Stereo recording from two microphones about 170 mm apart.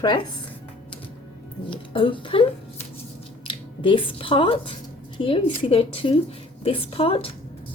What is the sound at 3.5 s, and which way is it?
A woman's voice, 30° left (ahead or behind).